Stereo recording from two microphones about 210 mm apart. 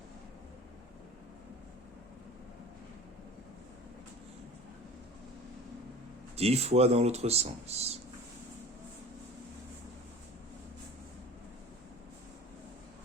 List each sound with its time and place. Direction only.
6.3 s speech: 30° right (ahead or behind)